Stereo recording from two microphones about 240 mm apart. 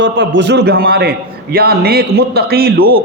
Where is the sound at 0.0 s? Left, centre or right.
Right.